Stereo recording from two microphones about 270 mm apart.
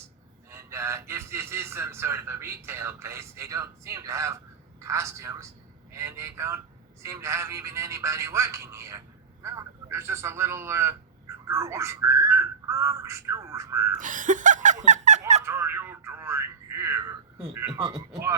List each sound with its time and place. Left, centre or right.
0.5 s a man's voice: centre
14.0 s speech: right
15.4 s a sound: centre
17.5 s a man's voice: centre